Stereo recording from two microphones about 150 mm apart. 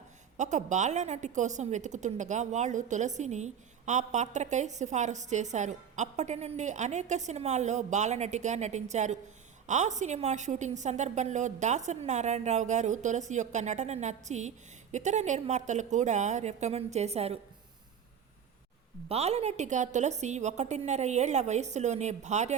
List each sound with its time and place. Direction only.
0.3 s a woman's voice: 55° right (ahead or behind)
19.0 s a woman's voice: 45° right (ahead or behind)